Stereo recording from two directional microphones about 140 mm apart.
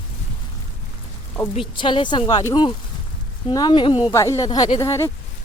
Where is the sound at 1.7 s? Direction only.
35° left (ahead or behind).